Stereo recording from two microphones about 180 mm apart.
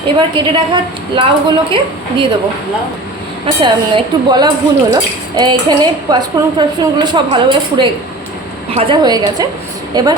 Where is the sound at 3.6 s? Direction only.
25° right (ahead or behind).